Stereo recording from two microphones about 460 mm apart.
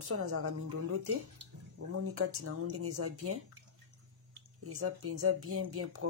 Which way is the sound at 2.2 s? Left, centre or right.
Right.